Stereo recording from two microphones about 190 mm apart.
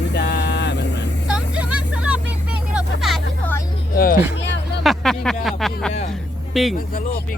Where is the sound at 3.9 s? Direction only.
50° left (ahead or behind).